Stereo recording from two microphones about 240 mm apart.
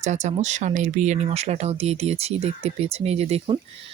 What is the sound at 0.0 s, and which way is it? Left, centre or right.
Speech, right.